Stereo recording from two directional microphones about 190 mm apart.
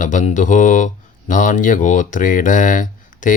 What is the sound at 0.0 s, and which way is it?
Mantra, 40° left (ahead or behind).